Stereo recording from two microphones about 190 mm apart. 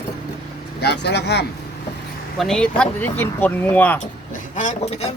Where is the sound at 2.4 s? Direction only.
Centre (ahead or behind).